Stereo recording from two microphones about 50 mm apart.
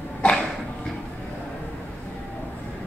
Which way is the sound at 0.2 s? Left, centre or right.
Centre.